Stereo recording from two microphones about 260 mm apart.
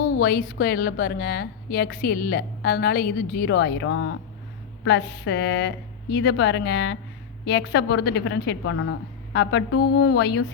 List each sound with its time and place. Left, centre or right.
0.0 s a woman's voice: left